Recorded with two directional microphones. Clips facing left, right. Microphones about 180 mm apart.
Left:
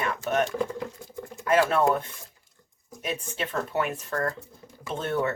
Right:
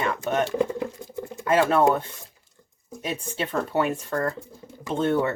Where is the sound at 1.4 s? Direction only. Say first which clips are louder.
Right 1 dB; 25° right (ahead or behind).